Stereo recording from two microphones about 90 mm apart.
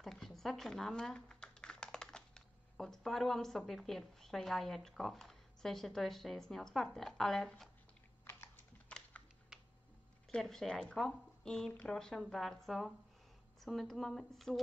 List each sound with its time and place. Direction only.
0.0 s speech: 5° left (ahead or behind)
8.3 s typing: 25° left (ahead or behind)
8.8 s typing: 15° left (ahead or behind)
9.5 s a sound: 5° right (ahead or behind)
10.3 s speech: 5° left (ahead or behind)